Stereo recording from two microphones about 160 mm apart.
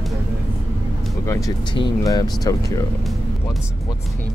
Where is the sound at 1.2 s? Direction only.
20° left (ahead or behind).